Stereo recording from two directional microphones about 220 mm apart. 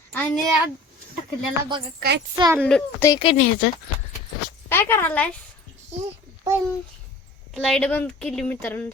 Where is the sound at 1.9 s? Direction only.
50° right (ahead or behind).